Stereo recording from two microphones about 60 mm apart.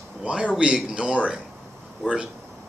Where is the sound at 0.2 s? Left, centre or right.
Centre.